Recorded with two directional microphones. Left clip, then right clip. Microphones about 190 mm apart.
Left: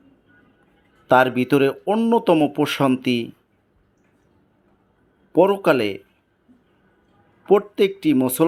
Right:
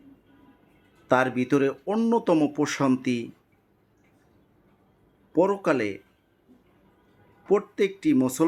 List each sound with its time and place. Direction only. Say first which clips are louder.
1.0 s speech: left 7 dB; 20° left (ahead or behind)
5.3 s speech: left 7 dB; 15° left (ahead or behind)
7.4 s speech: left 6 dB; 20° left (ahead or behind)